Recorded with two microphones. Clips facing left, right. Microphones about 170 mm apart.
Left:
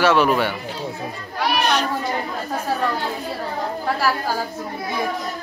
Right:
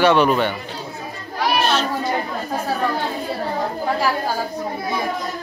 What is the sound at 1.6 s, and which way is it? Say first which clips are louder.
Children playing: even; 15° left (ahead or behind).